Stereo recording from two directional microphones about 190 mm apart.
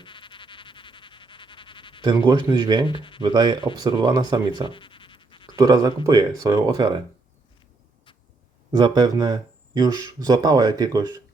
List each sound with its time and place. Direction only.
0.0 s frog: 25° left (ahead or behind)
2.1 s speech: 20° right (ahead or behind)
2.8 s speech: 25° left (ahead or behind)
3.2 s speech: 20° right (ahead or behind)
4.6 s scratch: 25° left (ahead or behind)
5.5 s speech: 20° right (ahead or behind)
8.7 s speech: 20° right (ahead or behind)